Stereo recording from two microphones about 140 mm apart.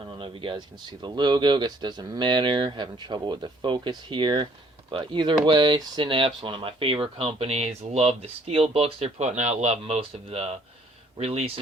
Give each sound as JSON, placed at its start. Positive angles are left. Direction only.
{"t": 0.0, "sound": "speech", "side_deg": -40}